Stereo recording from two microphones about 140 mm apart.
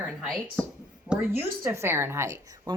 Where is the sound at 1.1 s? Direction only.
10° right (ahead or behind).